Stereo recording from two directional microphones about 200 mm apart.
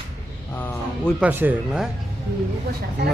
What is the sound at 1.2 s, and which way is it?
Speech, 10° right (ahead or behind).